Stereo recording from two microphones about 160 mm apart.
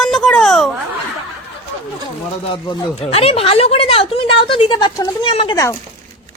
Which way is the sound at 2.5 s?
30° left (ahead or behind).